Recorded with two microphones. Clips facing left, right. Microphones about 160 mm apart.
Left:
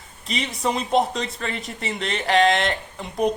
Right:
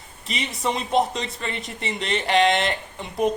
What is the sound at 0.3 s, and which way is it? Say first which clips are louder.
Speech: left 2 dB; centre (ahead or behind).